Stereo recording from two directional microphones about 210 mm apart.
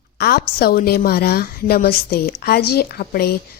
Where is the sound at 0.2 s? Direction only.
50° left (ahead or behind).